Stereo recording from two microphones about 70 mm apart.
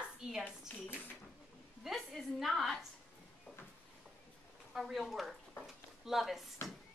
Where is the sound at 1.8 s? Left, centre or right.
Centre.